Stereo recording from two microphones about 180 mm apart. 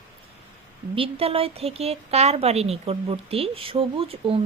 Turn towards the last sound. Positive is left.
turn(degrees=-30)  # may be behind; listen again after turning